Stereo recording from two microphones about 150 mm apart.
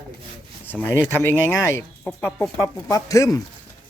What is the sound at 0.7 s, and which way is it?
Speech, 15° left (ahead or behind).